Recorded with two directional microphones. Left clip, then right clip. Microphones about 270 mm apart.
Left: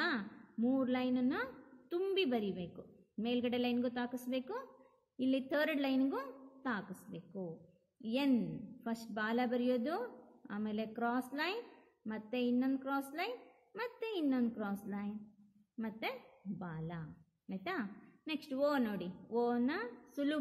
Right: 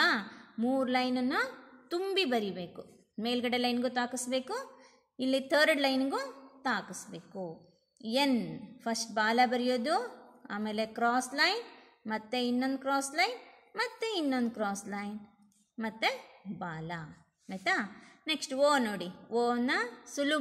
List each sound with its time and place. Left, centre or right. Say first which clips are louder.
0.0 s a woman's voice: right 9 dB; right